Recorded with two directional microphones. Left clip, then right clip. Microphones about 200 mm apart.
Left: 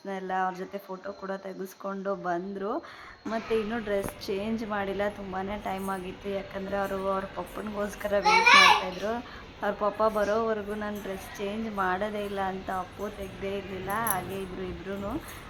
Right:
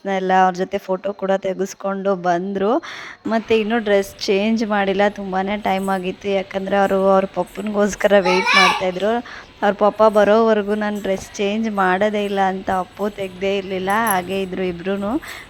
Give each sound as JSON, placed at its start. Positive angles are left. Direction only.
{"t": 0.0, "sound": "a woman's voice", "side_deg": -45}